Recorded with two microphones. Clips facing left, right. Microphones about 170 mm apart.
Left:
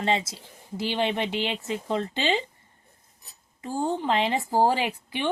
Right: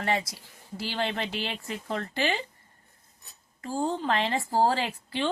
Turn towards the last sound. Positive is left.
turn(degrees=15)  # may be behind; listen again after turning